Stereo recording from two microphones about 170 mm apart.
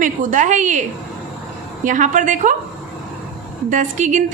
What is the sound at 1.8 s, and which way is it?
Speech, 50° right (ahead or behind).